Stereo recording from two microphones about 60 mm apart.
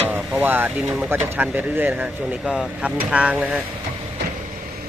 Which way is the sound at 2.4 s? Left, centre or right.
Centre.